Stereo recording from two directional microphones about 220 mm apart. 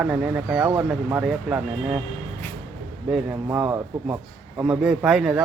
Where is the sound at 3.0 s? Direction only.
5° right (ahead or behind).